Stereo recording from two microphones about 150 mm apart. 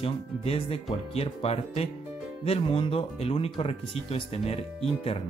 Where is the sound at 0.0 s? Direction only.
40° left (ahead or behind).